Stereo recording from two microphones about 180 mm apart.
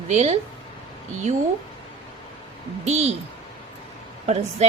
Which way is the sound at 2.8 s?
40° right (ahead or behind).